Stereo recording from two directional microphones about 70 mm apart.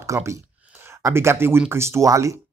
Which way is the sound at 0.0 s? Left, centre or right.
Right.